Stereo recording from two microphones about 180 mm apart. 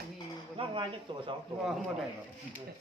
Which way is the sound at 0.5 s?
30° right (ahead or behind).